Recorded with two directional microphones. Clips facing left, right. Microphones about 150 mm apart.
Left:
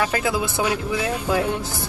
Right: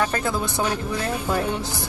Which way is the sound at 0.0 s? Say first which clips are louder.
Left 1 dB; 10° left (ahead or behind).